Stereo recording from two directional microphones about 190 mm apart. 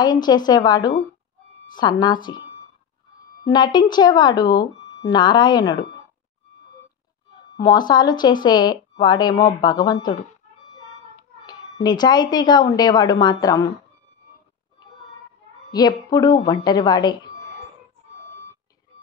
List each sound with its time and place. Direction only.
0.0 s speech: 20° left (ahead or behind)
3.4 s speech: 20° left (ahead or behind)
7.5 s speech: 20° left (ahead or behind)
11.4 s speech: 20° left (ahead or behind)
15.7 s speech: 20° left (ahead or behind)